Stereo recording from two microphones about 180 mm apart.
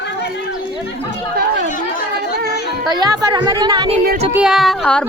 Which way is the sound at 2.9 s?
25° right (ahead or behind).